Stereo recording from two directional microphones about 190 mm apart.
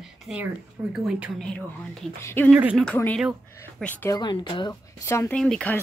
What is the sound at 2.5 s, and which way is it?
Speech, 5° right (ahead or behind).